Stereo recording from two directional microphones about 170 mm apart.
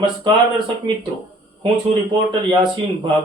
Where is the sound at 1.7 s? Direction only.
25° right (ahead or behind).